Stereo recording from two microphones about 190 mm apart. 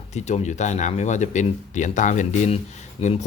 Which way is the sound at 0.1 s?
35° left (ahead or behind).